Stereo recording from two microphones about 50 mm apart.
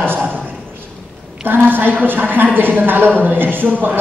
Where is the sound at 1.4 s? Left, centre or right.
Right.